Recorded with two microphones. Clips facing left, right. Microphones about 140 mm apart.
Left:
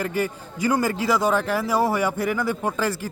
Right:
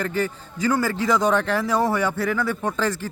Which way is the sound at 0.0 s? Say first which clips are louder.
Even; 10° left (ahead or behind).